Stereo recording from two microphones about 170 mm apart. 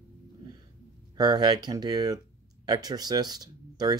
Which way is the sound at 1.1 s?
25° right (ahead or behind).